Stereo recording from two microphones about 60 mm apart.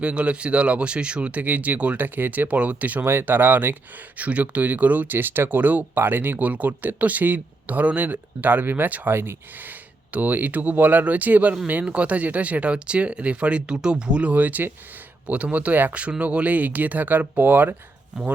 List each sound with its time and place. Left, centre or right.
0.0 s speech: right
3.0 s speech: right